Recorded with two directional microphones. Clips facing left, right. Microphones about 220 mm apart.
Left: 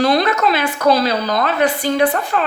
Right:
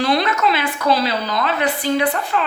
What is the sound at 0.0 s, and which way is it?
A woman's voice, 40° left (ahead or behind).